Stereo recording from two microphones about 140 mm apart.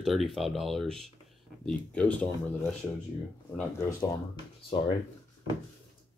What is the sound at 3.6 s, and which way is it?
Speech, 20° left (ahead or behind).